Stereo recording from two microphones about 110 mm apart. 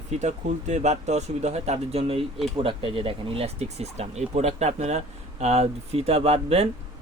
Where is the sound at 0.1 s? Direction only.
90° right.